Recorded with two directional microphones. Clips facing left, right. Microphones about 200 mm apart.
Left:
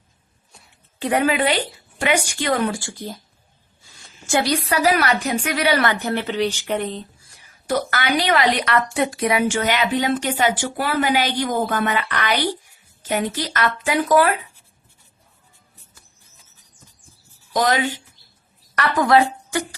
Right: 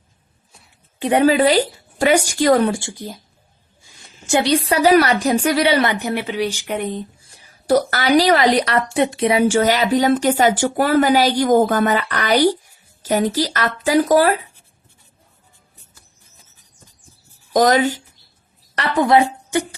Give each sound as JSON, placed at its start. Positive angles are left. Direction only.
{"t": 0.9, "sound": "a woman's voice", "side_deg": -20}
{"t": 1.2, "sound": "a woman's voice", "side_deg": -35}
{"t": 2.7, "sound": "a woman's voice", "side_deg": -20}
{"t": 5.8, "sound": "speech", "side_deg": -15}
{"t": 7.2, "sound": "a woman's voice", "side_deg": -30}
{"t": 17.5, "sound": "speech", "side_deg": -45}
{"t": 18.8, "sound": "speech", "side_deg": -25}